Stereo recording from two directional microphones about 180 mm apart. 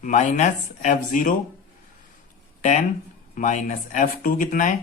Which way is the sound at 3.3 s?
45° left (ahead or behind).